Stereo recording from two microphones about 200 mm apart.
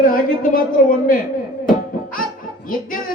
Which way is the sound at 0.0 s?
45° left (ahead or behind).